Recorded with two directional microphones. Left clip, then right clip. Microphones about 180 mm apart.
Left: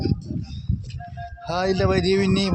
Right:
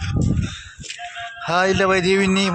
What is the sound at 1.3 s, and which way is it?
Speech, 10° right (ahead or behind).